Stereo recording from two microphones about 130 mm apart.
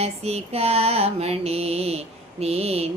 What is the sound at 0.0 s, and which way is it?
Mantra, 50° right (ahead or behind).